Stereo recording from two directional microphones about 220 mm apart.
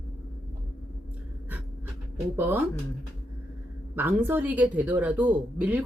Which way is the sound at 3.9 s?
10° right (ahead or behind).